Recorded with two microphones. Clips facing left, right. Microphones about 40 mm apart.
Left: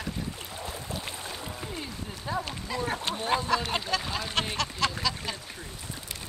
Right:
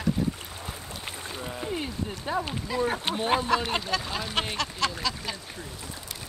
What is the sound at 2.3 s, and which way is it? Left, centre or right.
Speech, centre.